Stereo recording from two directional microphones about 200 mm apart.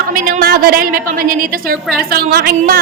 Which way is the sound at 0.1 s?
45° right (ahead or behind).